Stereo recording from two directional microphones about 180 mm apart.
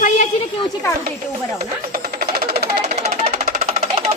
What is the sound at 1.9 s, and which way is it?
Music, 60° right (ahead or behind).